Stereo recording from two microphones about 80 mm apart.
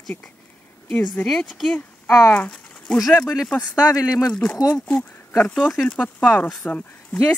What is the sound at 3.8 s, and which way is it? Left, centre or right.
Speech, left.